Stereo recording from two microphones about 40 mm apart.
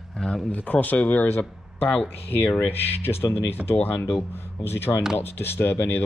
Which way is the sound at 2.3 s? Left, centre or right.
Left.